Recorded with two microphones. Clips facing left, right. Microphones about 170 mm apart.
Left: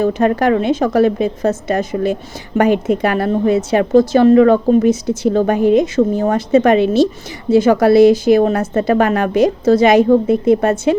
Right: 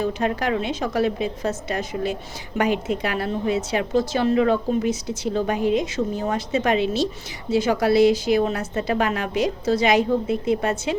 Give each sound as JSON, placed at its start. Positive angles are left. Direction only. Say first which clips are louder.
{"t": 0.0, "sound": "a woman's voice", "louder": "left 9 dB", "side_deg": 50}